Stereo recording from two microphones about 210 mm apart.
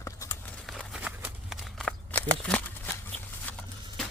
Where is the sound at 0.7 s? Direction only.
Centre (ahead or behind).